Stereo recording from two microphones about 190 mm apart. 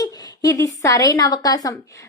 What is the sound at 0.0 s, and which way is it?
A woman's voice, 20° left (ahead or behind).